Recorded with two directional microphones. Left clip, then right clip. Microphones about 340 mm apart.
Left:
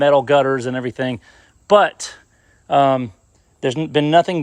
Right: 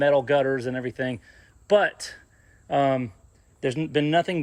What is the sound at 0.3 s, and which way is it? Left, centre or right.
Speech, left.